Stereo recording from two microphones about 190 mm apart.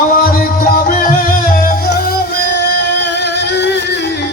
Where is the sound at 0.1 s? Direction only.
50° left (ahead or behind).